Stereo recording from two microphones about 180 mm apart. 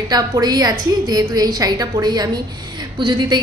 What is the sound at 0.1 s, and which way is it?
A woman's voice, 20° right (ahead or behind).